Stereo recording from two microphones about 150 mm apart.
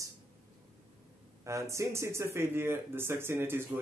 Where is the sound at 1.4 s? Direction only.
20° right (ahead or behind).